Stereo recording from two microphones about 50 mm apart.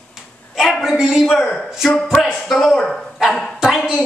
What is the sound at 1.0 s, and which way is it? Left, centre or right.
Speech, centre.